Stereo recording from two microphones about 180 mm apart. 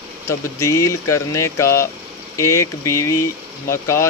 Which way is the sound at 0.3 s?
15° left (ahead or behind).